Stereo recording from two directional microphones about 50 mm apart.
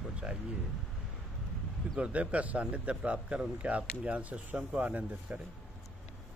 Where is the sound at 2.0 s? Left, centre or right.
Right.